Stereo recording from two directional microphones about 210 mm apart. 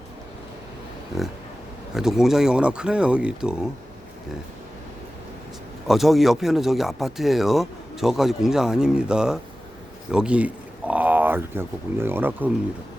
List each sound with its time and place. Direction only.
1.1 s speech: centre (ahead or behind)
5.9 s speech: centre (ahead or behind)